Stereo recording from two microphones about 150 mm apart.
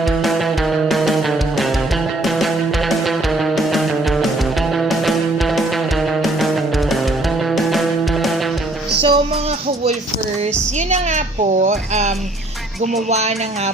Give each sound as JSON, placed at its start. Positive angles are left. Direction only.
{"t": 0.0, "sound": "music", "side_deg": 0}
{"t": 9.0, "sound": "music", "side_deg": -35}
{"t": 10.8, "sound": "a sound", "side_deg": -50}
{"t": 12.8, "sound": "music", "side_deg": -50}